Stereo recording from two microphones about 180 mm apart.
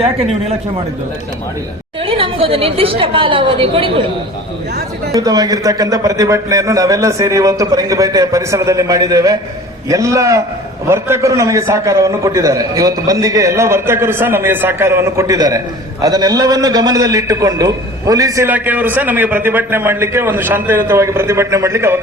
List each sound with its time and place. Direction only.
2.0 s a woman's voice: 30° right (ahead or behind)
5.1 s a man's voice: 20° right (ahead or behind)